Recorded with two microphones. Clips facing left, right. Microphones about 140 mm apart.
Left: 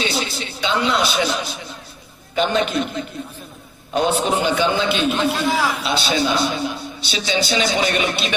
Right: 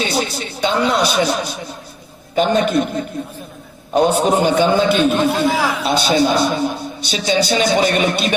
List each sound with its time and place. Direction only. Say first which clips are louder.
0.0 s a woman's voice: right 4 dB; 45° right (ahead or behind)